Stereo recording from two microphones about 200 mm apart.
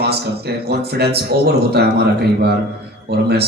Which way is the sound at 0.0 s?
55° right (ahead or behind).